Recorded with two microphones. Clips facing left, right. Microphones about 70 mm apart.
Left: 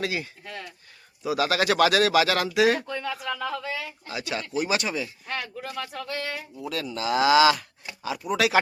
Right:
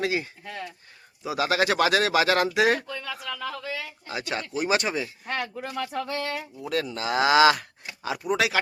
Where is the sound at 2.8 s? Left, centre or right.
Centre.